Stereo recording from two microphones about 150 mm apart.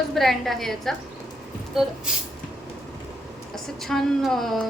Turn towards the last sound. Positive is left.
turn(degrees=0)  # may be behind; listen again after turning